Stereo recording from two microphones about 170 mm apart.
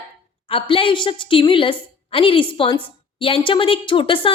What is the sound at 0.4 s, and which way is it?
A woman's voice, 30° left (ahead or behind).